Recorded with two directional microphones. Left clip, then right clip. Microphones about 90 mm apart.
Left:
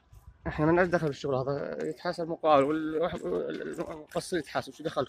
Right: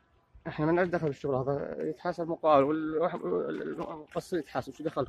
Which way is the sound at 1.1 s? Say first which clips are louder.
Even; 10° right (ahead or behind).